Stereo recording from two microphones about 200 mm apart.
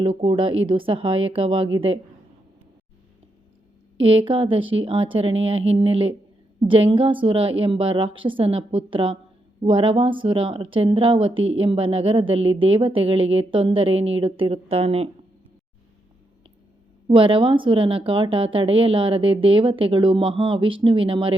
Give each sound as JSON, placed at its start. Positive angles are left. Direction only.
{"t": 0.0, "sound": "a woman's voice", "side_deg": -25}
{"t": 4.0, "sound": "a woman's voice", "side_deg": -30}
{"t": 17.1, "sound": "a woman's voice", "side_deg": -25}